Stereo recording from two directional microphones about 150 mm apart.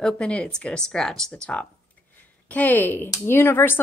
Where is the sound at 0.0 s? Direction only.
5° left (ahead or behind).